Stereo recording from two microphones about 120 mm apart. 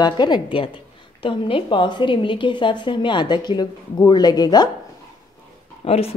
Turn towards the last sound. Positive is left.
turn(degrees=55)  # may be behind; listen again after turning